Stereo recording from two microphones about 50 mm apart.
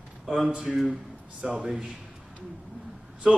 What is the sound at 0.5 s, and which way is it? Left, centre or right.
A man's voice, right.